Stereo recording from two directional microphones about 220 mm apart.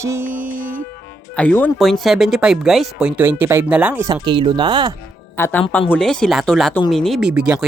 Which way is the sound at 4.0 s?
20° right (ahead or behind).